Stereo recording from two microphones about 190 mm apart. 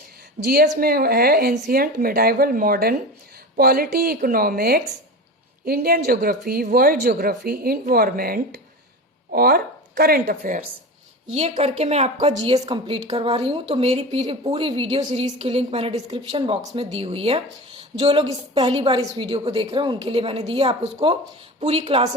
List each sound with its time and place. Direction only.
0.4 s a woman's voice: 55° right (ahead or behind)
11.3 s speech: 30° right (ahead or behind)
12.5 s a woman's voice: 25° right (ahead or behind)